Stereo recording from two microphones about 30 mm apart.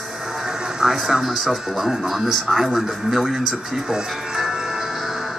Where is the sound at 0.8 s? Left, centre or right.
Right.